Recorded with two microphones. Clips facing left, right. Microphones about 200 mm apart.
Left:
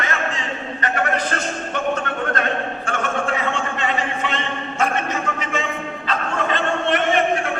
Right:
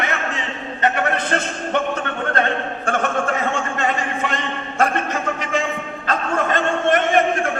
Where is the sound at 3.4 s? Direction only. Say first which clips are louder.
Right 2 dB; 45° right (ahead or behind).